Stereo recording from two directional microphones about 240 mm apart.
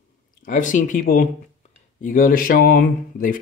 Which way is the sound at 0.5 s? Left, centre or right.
Left.